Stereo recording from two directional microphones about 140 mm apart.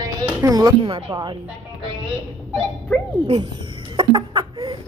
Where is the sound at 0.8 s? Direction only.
40° right (ahead or behind).